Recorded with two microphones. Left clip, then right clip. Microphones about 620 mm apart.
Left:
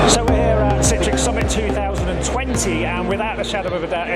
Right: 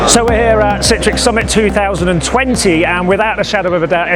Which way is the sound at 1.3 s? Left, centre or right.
Right.